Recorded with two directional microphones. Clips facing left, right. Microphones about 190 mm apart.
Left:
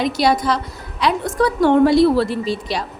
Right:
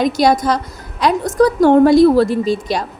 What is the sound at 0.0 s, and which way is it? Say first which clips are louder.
A woman's voice: right 4 dB; 45° right (ahead or behind).